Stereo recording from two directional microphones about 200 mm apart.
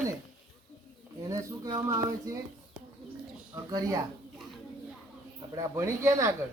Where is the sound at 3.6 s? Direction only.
20° right (ahead or behind).